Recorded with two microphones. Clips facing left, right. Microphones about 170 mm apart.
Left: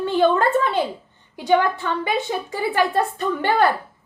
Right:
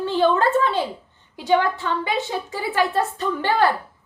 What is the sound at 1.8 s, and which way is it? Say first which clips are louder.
A woman's voice: left 1 dB; 50° left (ahead or behind).